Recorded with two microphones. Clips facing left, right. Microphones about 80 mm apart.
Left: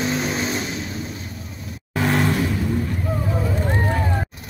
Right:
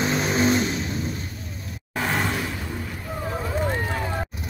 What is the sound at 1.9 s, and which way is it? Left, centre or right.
Vehicle, centre.